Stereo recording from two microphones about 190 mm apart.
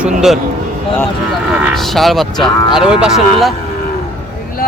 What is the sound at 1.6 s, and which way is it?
Speech, centre (ahead or behind).